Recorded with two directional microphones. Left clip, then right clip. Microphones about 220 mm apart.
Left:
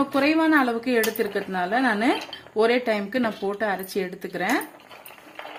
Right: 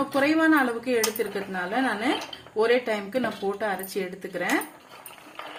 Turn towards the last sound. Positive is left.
turn(degrees=40)  # may be behind; listen again after turning